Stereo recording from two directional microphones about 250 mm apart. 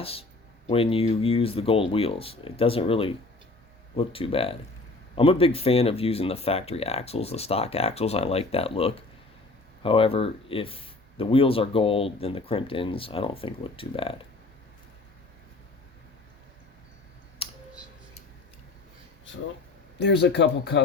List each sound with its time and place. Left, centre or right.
0.0 s speech: left
17.4 s a sound: left
20.0 s speech: left